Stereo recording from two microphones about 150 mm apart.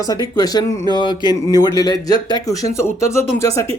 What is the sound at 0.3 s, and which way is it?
Speech, 25° left (ahead or behind).